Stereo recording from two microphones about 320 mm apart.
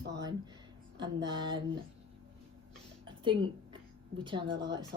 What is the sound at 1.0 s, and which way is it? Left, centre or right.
Speech, centre.